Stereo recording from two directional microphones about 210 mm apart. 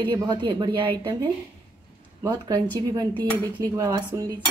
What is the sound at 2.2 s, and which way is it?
Speech, 20° right (ahead or behind).